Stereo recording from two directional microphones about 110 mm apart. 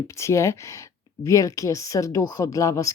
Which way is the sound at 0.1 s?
25° left (ahead or behind).